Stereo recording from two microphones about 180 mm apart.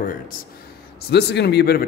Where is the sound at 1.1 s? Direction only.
65° left (ahead or behind).